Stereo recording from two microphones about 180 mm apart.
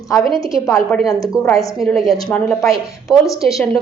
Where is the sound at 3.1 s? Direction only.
Centre (ahead or behind).